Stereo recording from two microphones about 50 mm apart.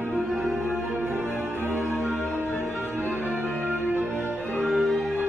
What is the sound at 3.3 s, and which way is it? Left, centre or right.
Music, right.